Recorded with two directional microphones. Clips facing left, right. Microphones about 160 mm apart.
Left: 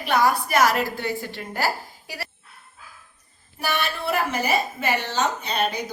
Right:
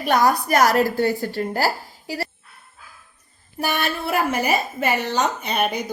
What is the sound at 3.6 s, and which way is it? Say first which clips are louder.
A woman's voice: right 3 dB; 50° right (ahead or behind).